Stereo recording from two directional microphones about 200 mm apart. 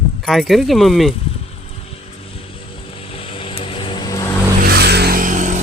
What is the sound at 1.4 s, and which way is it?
Vehicle, 30° left (ahead or behind).